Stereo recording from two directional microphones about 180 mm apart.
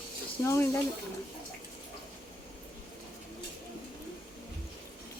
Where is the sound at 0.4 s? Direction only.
15° left (ahead or behind).